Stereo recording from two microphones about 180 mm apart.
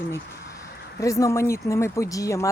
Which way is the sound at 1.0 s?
15° left (ahead or behind).